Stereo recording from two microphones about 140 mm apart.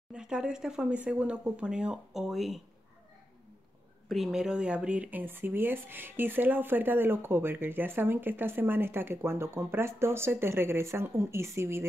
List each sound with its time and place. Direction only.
0.1 s speech: 5° right (ahead or behind)
4.1 s speech: centre (ahead or behind); by 11.8 s 20° right (ahead or behind)